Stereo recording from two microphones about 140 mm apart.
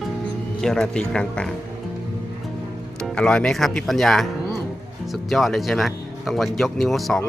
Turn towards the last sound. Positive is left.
turn(degrees=0)  # may be behind; listen again after turning